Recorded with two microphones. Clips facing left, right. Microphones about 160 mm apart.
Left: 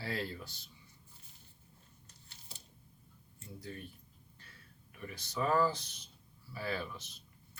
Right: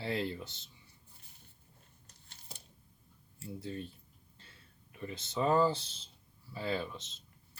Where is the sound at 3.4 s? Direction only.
25° right (ahead or behind).